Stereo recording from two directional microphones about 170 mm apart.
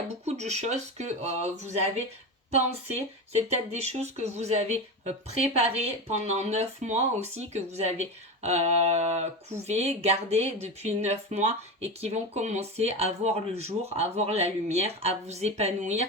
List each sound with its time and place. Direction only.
0.3 s speech: 40° right (ahead or behind)
3.5 s speech: 40° right (ahead or behind)